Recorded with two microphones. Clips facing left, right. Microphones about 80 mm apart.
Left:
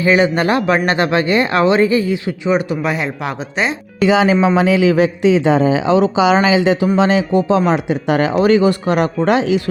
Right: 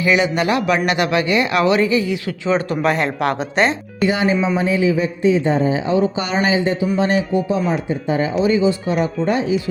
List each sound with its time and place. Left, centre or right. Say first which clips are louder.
0.0 s a man's voice: left 3 dB; left
2.5 s speech: left 1 dB; centre
4.0 s a man's voice: left 5 dB; left